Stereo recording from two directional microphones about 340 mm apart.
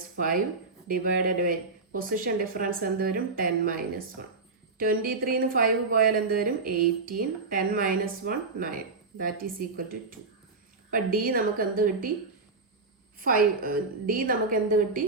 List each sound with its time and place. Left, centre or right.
0.9 s a woman's voice: right
4.8 s a woman's voice: right
13.1 s a woman's voice: right